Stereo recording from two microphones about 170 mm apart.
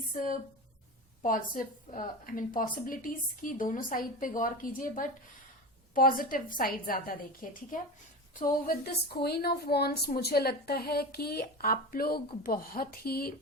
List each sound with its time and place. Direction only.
1.2 s a woman's voice: 55° left (ahead or behind)